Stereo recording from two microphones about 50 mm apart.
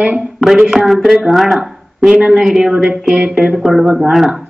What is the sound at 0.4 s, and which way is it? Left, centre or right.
Speech, centre.